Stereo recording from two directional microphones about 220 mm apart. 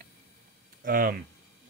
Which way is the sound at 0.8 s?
40° right (ahead or behind).